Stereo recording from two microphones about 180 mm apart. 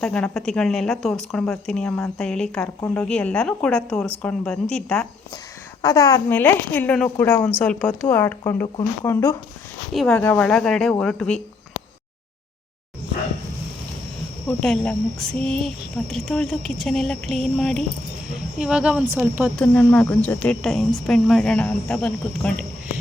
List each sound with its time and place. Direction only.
0.0 s a woman's voice: 5° left (ahead or behind)
5.8 s a woman's voice: 20° left (ahead or behind)
9.9 s a woman's voice: 5° left (ahead or behind)
14.4 s a woman's voice: 5° left (ahead or behind); by 19.5 s 10° right (ahead or behind)
19.5 s a woman's voice: 10° left (ahead or behind)